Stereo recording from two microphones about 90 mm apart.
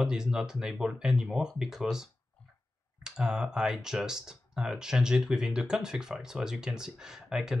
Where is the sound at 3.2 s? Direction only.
10° right (ahead or behind).